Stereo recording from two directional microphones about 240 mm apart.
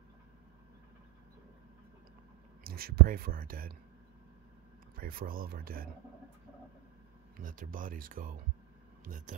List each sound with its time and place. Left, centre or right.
2.6 s speech: right
4.9 s speech: right
7.3 s speech: right